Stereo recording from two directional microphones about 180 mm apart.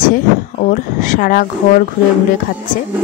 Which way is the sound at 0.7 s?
45° left (ahead or behind).